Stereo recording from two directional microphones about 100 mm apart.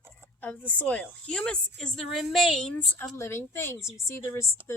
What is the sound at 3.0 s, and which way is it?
Speech, 25° left (ahead or behind).